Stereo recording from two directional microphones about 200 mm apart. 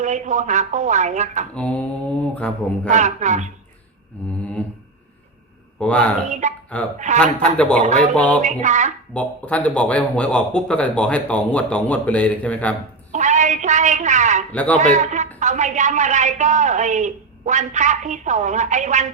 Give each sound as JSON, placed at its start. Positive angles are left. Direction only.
{"t": 0.0, "sound": "a man's voice", "side_deg": -35}
{"t": 1.5, "sound": "mantra", "side_deg": 5}
{"t": 2.9, "sound": "a man's voice", "side_deg": -35}
{"t": 5.8, "sound": "mantra", "side_deg": 5}
{"t": 6.2, "sound": "a man's voice", "side_deg": -35}
{"t": 7.2, "sound": "mantra", "side_deg": 5}
{"t": 7.8, "sound": "a man's voice", "side_deg": -40}
{"t": 8.1, "sound": "mantra", "side_deg": 5}
{"t": 8.6, "sound": "a man's voice", "side_deg": -35}
{"t": 9.1, "sound": "speech", "side_deg": 5}
{"t": 13.1, "sound": "a woman's voice", "side_deg": -40}
{"t": 14.5, "sound": "speech", "side_deg": 5}
{"t": 14.9, "sound": "a man's voice", "side_deg": -35}